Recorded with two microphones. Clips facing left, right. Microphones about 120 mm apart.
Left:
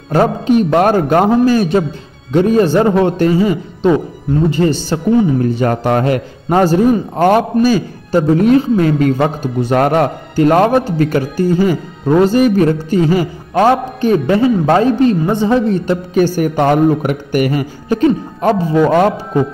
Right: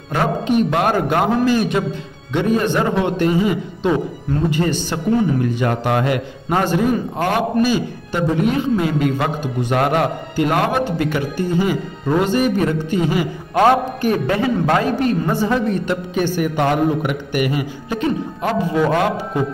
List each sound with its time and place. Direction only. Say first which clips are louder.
0.1 s a man's voice: left 6 dB; 40° left (ahead or behind)
13.6 s a man's voice: left 3 dB; 25° left (ahead or behind)
16.2 s a man's voice: left 6 dB; 45° left (ahead or behind)